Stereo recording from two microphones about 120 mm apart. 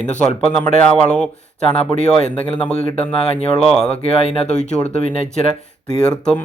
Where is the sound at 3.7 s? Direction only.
5° left (ahead or behind).